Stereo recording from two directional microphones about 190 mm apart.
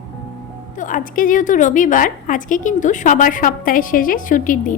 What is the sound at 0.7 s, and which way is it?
A woman's voice, 45° left (ahead or behind).